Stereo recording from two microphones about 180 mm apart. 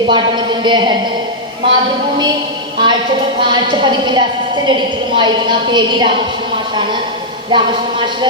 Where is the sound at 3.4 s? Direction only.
25° right (ahead or behind).